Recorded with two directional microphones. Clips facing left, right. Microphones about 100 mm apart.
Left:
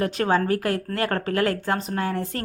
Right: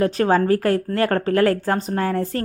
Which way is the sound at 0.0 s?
35° right (ahead or behind).